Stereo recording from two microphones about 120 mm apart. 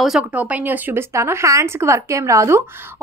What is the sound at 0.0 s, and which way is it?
Speech, 5° right (ahead or behind).